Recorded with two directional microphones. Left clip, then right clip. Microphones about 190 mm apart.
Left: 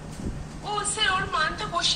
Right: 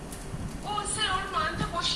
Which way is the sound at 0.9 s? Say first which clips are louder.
Left 5 dB; 55° left (ahead or behind).